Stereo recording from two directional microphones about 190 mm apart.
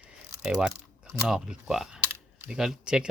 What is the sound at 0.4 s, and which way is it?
Speech, 5° right (ahead or behind).